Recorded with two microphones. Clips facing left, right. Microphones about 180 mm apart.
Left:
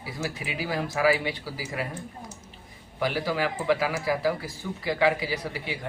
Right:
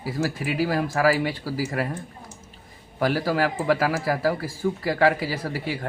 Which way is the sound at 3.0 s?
50° right (ahead or behind).